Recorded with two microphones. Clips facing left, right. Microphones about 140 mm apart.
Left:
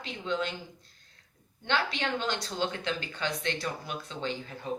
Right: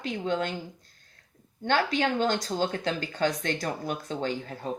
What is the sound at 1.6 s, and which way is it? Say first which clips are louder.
Speech: right 5 dB; 45° right (ahead or behind).